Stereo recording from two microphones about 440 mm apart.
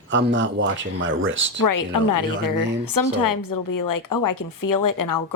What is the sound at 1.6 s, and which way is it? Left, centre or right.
A woman's voice, left.